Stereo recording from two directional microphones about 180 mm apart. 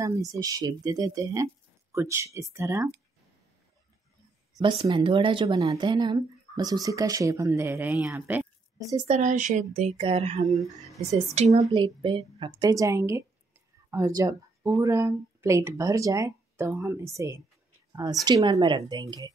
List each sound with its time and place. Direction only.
0.0 s speech: 20° right (ahead or behind)
4.6 s speech: 30° right (ahead or behind); by 8.8 s 10° right (ahead or behind)
8.9 s speech: 35° right (ahead or behind)
10.5 s speech: centre (ahead or behind)
11.3 s speech: 40° right (ahead or behind)
11.7 s speech: 25° right (ahead or behind)